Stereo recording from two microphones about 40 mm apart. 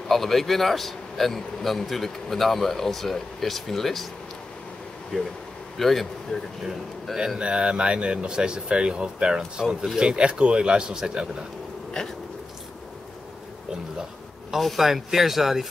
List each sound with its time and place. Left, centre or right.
0.1 s a man's voice: centre
5.1 s a man's voice: centre
6.3 s speech: left
7.3 s speech: right
14.5 s speech: centre